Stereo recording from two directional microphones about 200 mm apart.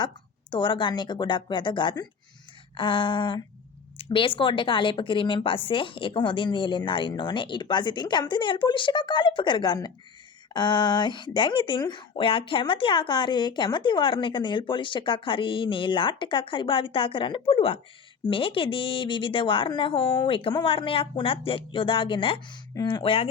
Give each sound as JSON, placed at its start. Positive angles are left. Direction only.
{"t": 0.5, "sound": "speech", "side_deg": 25}